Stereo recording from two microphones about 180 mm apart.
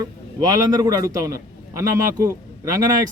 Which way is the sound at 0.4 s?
20° right (ahead or behind).